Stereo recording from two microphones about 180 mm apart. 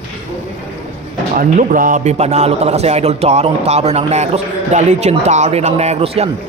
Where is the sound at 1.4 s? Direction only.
50° right (ahead or behind).